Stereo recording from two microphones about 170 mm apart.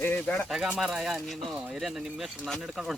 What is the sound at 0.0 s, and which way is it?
Speech, 10° left (ahead or behind).